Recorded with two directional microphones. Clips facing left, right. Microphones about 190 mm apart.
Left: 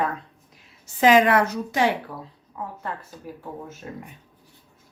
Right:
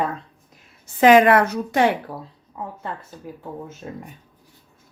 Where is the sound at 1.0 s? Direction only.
60° right (ahead or behind).